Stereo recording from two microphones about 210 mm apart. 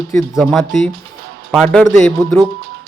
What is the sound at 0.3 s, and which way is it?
Speech, centre (ahead or behind).